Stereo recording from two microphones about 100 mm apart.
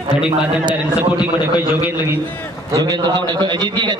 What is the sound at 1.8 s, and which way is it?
Speech, 20° right (ahead or behind).